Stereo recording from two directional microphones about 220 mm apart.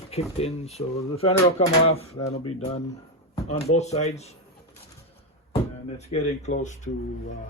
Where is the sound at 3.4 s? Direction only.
30° left (ahead or behind).